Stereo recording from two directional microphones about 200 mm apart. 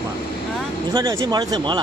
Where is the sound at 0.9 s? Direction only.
15° right (ahead or behind).